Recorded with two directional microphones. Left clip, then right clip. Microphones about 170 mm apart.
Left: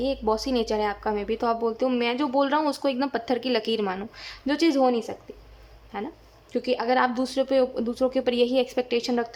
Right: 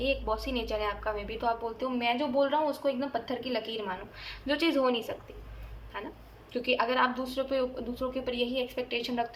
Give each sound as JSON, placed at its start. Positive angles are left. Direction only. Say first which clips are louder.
{"t": 0.0, "sound": "a woman's voice", "louder": "left 5 dB", "side_deg": 35}